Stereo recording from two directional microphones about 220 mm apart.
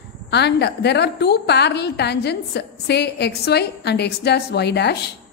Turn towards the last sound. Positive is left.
turn(degrees=50)  # may be behind; listen again after turning